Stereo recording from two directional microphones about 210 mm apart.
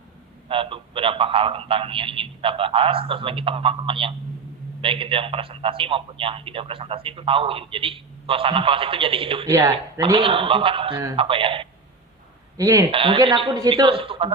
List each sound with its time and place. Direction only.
0.4 s a man's voice: 25° right (ahead or behind)
9.5 s a man's voice: 15° right (ahead or behind)